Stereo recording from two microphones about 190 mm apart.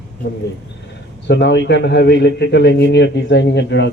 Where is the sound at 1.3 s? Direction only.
65° left (ahead or behind).